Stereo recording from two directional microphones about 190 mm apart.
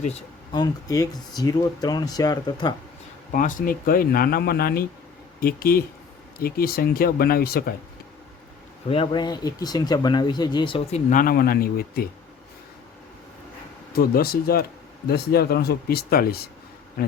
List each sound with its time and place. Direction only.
0.5 s speech: 20° left (ahead or behind)
3.3 s speech: 45° left (ahead or behind)
8.9 s speech: 25° left (ahead or behind)
11.1 s speech: 45° left (ahead or behind)
13.9 s speech: 50° left (ahead or behind)